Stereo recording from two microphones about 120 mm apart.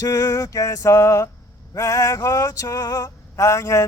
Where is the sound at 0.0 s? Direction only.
30° left (ahead or behind).